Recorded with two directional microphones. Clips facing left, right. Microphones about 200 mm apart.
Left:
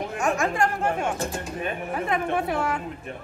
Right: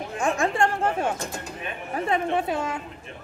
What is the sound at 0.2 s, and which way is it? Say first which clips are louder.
Speech: right 1 dB; 30° right (ahead or behind).